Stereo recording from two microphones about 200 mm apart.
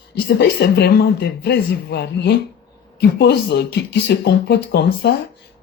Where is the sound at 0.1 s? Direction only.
55° left (ahead or behind).